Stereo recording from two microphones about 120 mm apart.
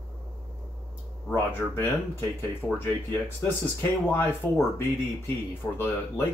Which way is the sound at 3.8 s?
20° left (ahead or behind).